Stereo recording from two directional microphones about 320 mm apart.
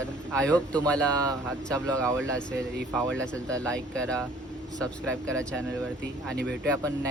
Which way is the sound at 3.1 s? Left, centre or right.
Centre.